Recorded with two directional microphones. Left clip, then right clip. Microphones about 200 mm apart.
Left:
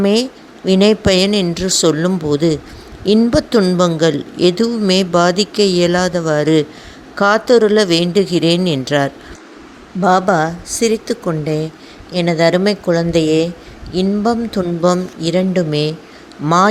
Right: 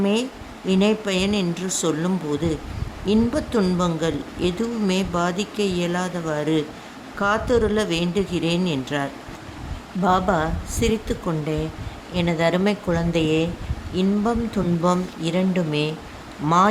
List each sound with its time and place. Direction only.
0.0 s speech: 30° left (ahead or behind)